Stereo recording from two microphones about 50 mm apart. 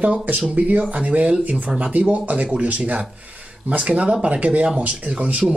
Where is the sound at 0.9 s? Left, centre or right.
Right.